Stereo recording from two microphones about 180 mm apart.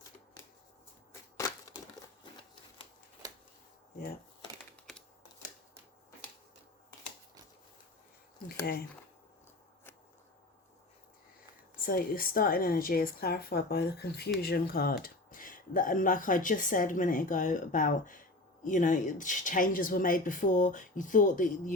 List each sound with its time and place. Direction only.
1.4 s crushing: 15° left (ahead or behind)
11.9 s a woman's voice: 55° left (ahead or behind)